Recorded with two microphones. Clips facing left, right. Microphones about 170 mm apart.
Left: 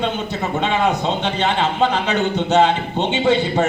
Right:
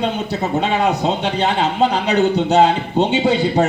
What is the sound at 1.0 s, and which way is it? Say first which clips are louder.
A man's voice: right 2 dB; 40° right (ahead or behind).